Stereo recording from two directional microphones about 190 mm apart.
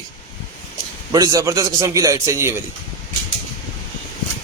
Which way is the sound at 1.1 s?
20° right (ahead or behind).